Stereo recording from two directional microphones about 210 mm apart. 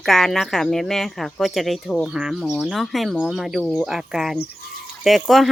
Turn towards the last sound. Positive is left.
turn(degrees=0)  # may be behind; listen again after turning